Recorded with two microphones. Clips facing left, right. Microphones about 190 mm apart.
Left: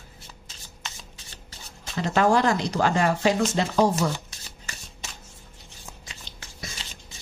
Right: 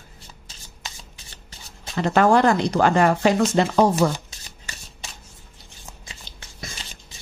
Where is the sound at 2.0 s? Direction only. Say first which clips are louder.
Right 4 dB; 60° right (ahead or behind).